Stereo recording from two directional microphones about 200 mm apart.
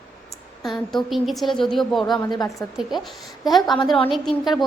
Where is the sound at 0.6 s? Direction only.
Centre (ahead or behind).